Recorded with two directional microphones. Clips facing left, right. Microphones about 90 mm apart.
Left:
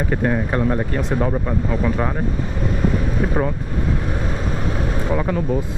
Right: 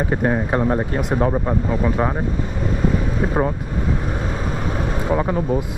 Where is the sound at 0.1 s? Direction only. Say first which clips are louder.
Even; 20° right (ahead or behind).